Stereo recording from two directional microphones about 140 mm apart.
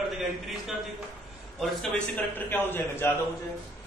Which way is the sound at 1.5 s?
10° left (ahead or behind).